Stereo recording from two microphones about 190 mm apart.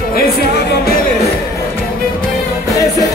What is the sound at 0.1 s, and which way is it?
Music, 55° left (ahead or behind).